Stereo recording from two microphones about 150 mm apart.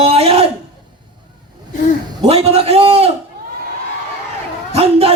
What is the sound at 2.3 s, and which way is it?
Speech, 40° right (ahead or behind).